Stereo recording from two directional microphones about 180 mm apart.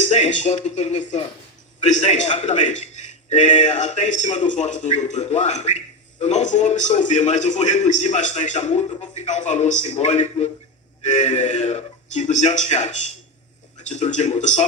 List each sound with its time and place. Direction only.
0.0 s a man's voice: 40° left (ahead or behind)